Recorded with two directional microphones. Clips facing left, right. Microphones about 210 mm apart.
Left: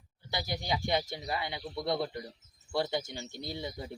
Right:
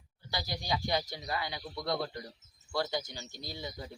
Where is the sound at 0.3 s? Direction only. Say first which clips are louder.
Left 2 dB; 25° left (ahead or behind).